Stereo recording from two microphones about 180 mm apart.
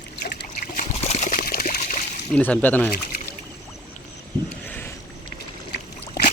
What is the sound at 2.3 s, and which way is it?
Speech, 10° left (ahead or behind).